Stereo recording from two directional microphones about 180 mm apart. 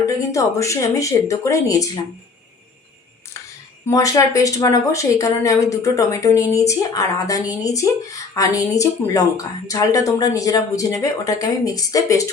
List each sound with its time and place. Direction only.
0.0 s speech: 15° left (ahead or behind)
3.8 s a woman's voice: 15° left (ahead or behind)